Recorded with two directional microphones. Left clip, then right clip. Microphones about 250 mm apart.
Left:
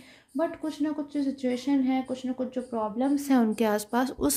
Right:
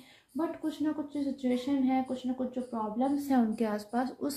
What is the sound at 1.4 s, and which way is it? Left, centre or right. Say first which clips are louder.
A woman's voice: left 3 dB; left.